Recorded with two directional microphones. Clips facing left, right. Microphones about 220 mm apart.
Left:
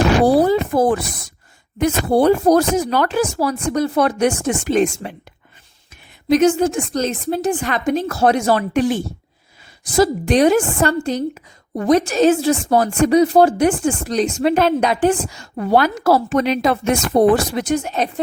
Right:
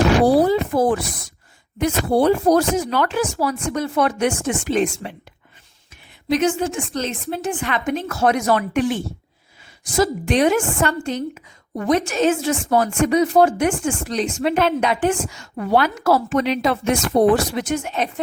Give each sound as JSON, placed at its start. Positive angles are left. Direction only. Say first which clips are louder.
{"t": 0.3, "sound": "a sound", "louder": "left 1 dB", "side_deg": 45}
{"t": 1.8, "sound": "a woman's voice", "louder": "left 2 dB", "side_deg": 45}
{"t": 6.2, "sound": "a woman's voice", "louder": "left 5 dB", "side_deg": 40}